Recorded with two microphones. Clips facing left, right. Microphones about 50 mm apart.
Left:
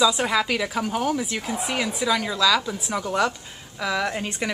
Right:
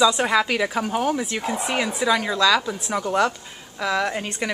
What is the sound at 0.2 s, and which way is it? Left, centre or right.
A woman's voice, centre.